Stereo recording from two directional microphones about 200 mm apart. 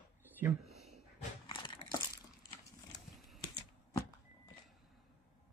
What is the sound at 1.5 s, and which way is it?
Crumpling, 25° left (ahead or behind).